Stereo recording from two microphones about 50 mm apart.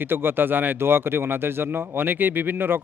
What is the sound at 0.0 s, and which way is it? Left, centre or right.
Speech, right.